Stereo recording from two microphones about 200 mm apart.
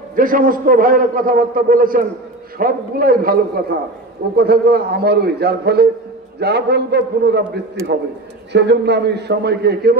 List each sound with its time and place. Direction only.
0.1 s a man's voice: 45° right (ahead or behind)
8.5 s a man's voice: 60° right (ahead or behind)